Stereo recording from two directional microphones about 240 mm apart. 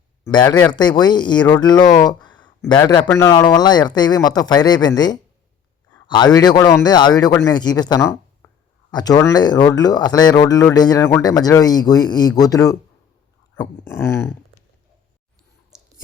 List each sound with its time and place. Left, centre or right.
0.3 s a man's voice: centre